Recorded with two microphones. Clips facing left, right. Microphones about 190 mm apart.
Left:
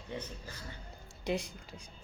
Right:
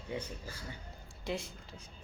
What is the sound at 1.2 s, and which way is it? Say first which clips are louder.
Speech: left 4 dB; 15° left (ahead or behind).